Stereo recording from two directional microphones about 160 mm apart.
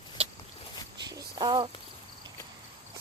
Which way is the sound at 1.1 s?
25° right (ahead or behind).